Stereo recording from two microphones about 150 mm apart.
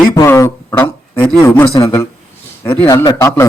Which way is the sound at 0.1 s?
20° left (ahead or behind).